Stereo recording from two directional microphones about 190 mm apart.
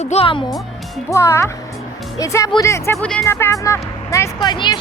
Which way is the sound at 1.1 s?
15° left (ahead or behind).